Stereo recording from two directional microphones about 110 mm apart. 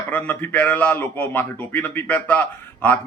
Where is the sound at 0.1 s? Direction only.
15° left (ahead or behind).